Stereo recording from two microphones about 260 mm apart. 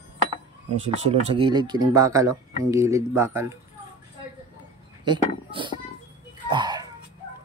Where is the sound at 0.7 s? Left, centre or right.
Right.